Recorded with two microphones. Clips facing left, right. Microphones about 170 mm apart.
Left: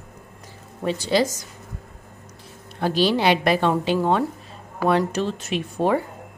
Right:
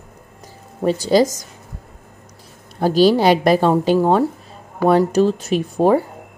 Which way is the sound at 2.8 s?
40° right (ahead or behind).